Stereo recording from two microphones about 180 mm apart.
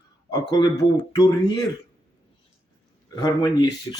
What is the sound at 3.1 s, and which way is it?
Speech, 25° left (ahead or behind).